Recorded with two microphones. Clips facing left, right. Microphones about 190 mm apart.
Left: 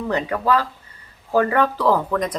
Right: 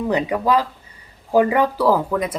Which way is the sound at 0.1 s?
15° right (ahead or behind).